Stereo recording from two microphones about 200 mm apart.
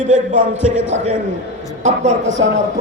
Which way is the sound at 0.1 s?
35° right (ahead or behind).